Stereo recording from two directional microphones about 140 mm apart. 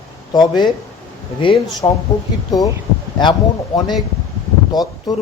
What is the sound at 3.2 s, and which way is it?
Speech, 30° left (ahead or behind).